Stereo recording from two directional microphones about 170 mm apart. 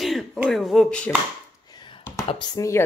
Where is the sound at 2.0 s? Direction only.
20° left (ahead or behind).